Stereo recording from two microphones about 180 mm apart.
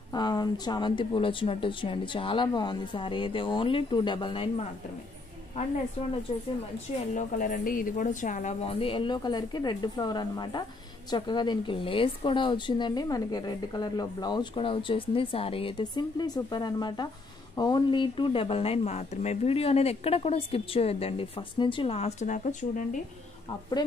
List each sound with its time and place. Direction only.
0.1 s speech: 25° left (ahead or behind)
7.2 s speech: 45° left (ahead or behind)
23.8 s speech: 25° left (ahead or behind)